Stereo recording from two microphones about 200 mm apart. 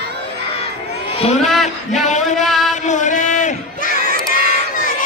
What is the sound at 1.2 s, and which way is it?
Speech, 35° left (ahead or behind).